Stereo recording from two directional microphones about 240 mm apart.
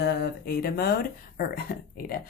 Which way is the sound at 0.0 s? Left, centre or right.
Left.